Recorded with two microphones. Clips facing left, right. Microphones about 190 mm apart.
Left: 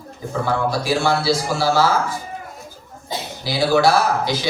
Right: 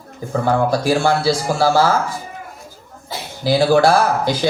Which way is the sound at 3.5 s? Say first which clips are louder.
Right 4 dB; 50° right (ahead or behind).